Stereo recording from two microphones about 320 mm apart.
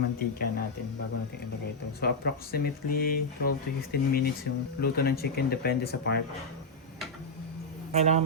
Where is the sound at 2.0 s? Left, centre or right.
Left.